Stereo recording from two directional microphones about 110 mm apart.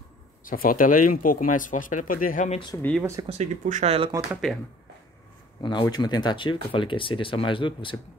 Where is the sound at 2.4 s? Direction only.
90° left.